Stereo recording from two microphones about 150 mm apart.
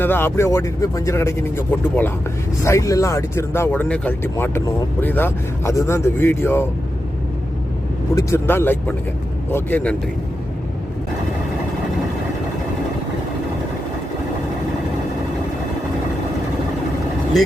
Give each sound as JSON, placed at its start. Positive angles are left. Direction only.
{"t": 0.0, "sound": "speech", "side_deg": 15}
{"t": 8.1, "sound": "speech", "side_deg": 15}